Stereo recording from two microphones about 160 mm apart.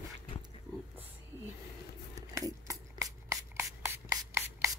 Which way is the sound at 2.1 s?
20° right (ahead or behind).